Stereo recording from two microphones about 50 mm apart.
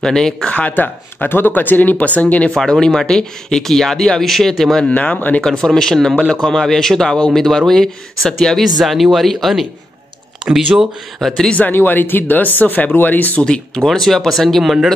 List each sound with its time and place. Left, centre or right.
0.0 s speech: centre
0.5 s speech: left
2.5 s speech: centre
4.8 s speech: left
5.4 s speech: centre
8.8 s speech: centre
11.6 s speech: left
13.7 s speech: centre
14.6 s speech: centre